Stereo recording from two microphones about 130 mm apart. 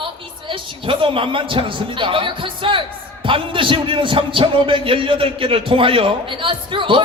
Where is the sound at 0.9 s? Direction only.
40° right (ahead or behind).